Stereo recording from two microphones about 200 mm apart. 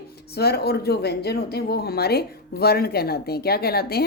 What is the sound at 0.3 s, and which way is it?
Speech, 50° left (ahead or behind).